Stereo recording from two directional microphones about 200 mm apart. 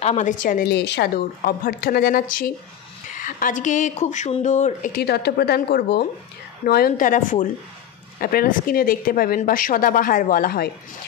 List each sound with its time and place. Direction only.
0.0 s a woman's voice: 35° left (ahead or behind)